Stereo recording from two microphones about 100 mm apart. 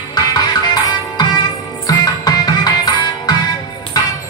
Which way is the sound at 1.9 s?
40° left (ahead or behind).